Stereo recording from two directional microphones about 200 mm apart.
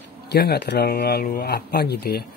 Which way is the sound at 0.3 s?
55° left (ahead or behind).